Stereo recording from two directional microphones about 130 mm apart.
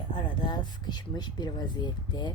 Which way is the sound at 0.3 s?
35° left (ahead or behind).